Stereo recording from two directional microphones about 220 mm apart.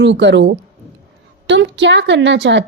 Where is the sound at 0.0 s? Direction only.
55° right (ahead or behind).